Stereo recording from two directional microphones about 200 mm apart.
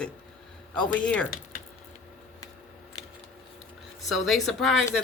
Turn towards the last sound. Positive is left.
turn(degrees=0)  # may be behind; listen again after turning